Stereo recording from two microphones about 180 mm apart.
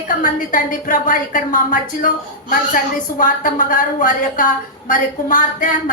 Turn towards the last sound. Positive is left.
turn(degrees=50)  # may be behind; listen again after turning